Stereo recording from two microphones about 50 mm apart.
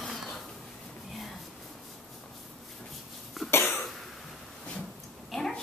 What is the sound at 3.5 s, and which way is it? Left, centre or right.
Cough, left.